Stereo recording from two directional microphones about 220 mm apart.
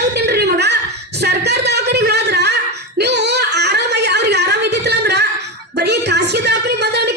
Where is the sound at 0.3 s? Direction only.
50° right (ahead or behind).